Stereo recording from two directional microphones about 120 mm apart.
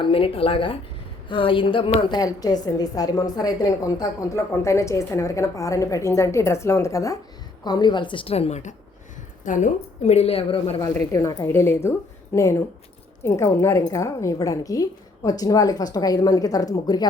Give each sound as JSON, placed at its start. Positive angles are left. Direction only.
{"t": 0.0, "sound": "a woman's voice", "side_deg": 50}
{"t": 7.6, "sound": "a woman's voice", "side_deg": 35}
{"t": 9.4, "sound": "a woman's voice", "side_deg": 90}
{"t": 11.1, "sound": "a woman's voice", "side_deg": 30}
{"t": 11.4, "sound": "a woman's voice", "side_deg": 20}